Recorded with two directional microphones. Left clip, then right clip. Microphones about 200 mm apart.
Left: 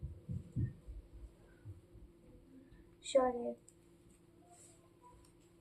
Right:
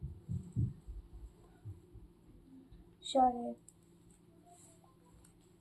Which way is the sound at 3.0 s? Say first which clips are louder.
Right 1 dB; 40° left (ahead or behind).